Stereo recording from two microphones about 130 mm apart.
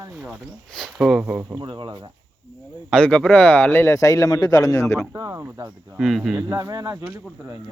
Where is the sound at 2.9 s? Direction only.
10° left (ahead or behind); by 5.0 s 25° left (ahead or behind).